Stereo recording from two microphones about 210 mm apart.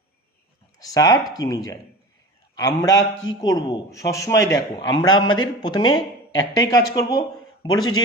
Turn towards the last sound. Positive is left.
turn(degrees=20)  # may be behind; listen again after turning